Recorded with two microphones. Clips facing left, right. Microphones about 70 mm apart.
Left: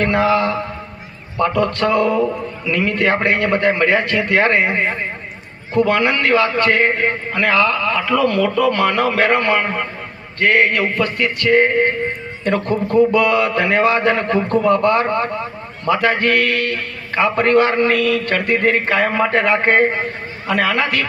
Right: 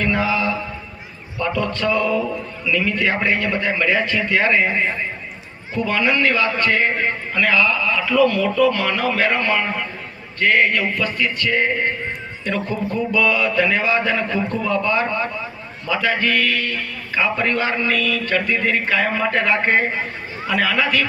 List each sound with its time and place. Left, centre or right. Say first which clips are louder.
0.0 s a man's voice: left 4 dB; left
19.3 s a man's voice: left 3 dB; left
20.5 s a man's voice: left 2 dB; left